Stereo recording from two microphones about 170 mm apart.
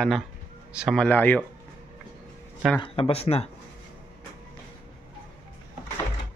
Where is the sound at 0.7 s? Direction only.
Centre (ahead or behind).